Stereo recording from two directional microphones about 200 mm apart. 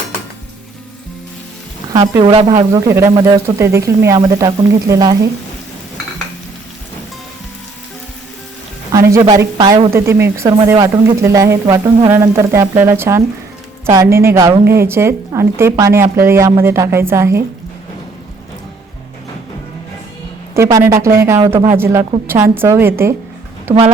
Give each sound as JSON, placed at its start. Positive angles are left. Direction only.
{"t": 1.9, "sound": "speech", "side_deg": -20}
{"t": 9.4, "sound": "speech", "side_deg": -20}
{"t": 20.5, "sound": "speech", "side_deg": -15}